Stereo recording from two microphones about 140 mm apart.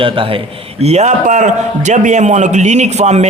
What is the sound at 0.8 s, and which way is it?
A man's voice, 50° right (ahead or behind).